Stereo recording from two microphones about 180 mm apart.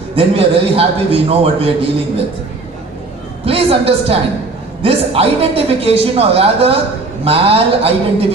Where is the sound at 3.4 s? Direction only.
30° right (ahead or behind).